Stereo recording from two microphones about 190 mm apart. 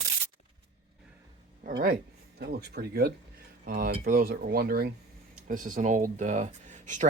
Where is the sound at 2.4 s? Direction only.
55° right (ahead or behind).